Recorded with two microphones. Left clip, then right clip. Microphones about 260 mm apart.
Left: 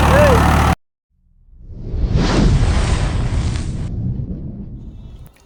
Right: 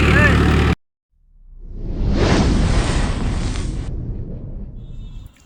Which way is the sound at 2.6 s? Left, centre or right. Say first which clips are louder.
Even; centre.